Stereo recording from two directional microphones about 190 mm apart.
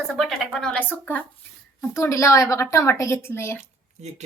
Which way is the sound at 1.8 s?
15° left (ahead or behind).